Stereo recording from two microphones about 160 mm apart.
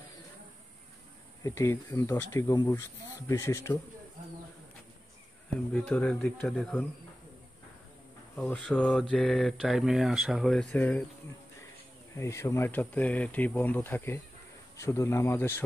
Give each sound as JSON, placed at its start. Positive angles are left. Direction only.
{"t": 1.4, "sound": "speech", "side_deg": 15}
{"t": 5.7, "sound": "speech", "side_deg": 10}
{"t": 8.4, "sound": "speech", "side_deg": 5}
{"t": 12.2, "sound": "speech", "side_deg": 15}